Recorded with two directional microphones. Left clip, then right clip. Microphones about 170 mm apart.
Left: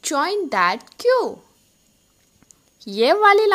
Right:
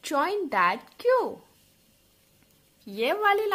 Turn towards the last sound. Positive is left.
turn(degrees=45)  # may be behind; listen again after turning